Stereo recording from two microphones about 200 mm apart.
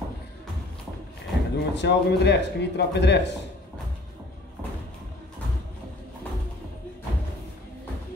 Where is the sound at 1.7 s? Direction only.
60° left (ahead or behind).